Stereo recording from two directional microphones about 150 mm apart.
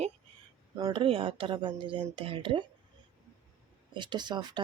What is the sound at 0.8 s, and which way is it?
Speech, 25° right (ahead or behind).